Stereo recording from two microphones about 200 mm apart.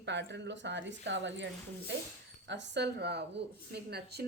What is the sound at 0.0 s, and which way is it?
A woman's voice, 60° right (ahead or behind).